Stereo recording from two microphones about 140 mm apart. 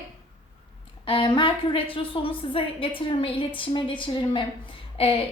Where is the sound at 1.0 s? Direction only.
40° left (ahead or behind).